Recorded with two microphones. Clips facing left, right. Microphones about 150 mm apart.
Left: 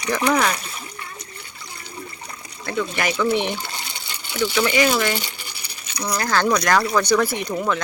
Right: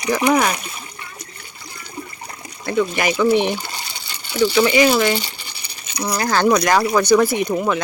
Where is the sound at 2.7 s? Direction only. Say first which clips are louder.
Right 5 dB; 15° right (ahead or behind).